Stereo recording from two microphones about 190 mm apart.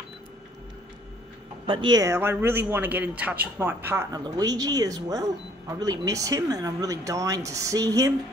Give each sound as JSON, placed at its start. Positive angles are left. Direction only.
{"t": 1.7, "sound": "speech", "side_deg": -25}